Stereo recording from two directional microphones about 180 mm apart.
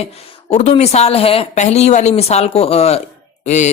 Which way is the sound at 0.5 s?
35° left (ahead or behind).